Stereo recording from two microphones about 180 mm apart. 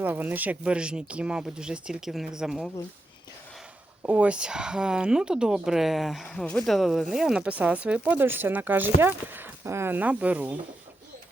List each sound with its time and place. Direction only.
0.0 s speech: 10° right (ahead or behind)
4.0 s speech: 10° right (ahead or behind)